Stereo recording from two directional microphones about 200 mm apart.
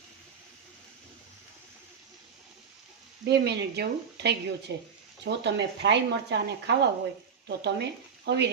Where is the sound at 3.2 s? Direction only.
55° right (ahead or behind).